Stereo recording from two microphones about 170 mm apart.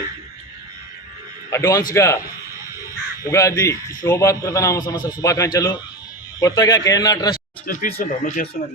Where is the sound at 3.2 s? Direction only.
20° left (ahead or behind).